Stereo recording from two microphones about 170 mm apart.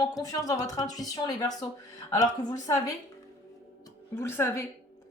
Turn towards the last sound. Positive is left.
turn(degrees=15)  # may be behind; listen again after turning